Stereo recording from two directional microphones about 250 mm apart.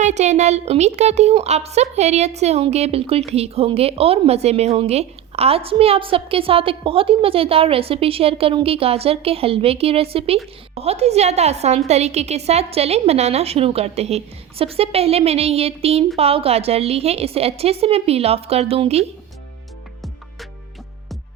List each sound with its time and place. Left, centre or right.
0.0 s a woman's voice: right